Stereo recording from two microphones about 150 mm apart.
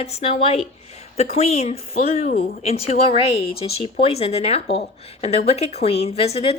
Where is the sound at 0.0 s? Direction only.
45° left (ahead or behind).